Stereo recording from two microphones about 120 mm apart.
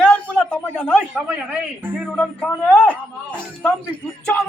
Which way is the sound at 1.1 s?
10° right (ahead or behind).